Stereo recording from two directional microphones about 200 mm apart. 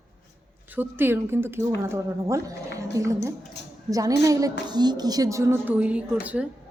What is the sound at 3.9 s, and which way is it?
A woman's voice, 15° right (ahead or behind).